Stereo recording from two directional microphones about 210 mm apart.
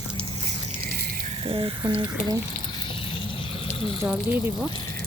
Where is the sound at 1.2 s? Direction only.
30° right (ahead or behind).